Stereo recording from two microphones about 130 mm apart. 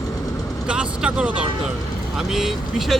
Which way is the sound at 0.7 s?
10° right (ahead or behind).